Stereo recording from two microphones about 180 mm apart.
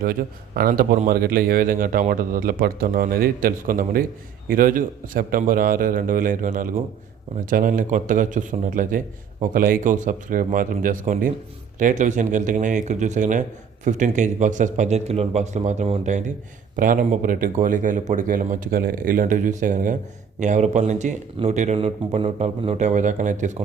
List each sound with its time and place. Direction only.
0.0 s a man's voice: 55° right (ahead or behind)